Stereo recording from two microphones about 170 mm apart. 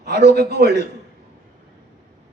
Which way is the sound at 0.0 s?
70° right (ahead or behind).